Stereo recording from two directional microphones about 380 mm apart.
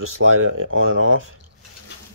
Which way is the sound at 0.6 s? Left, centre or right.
Right.